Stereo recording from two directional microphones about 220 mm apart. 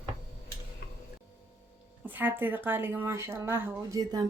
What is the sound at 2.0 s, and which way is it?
Speech, 10° right (ahead or behind).